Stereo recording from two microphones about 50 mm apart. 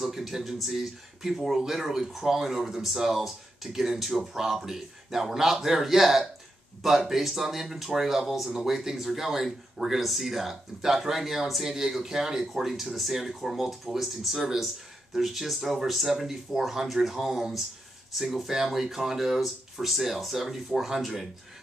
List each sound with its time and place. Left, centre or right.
0.0 s speech: centre